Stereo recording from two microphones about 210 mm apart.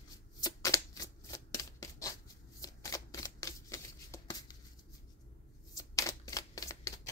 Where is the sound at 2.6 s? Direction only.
15° left (ahead or behind).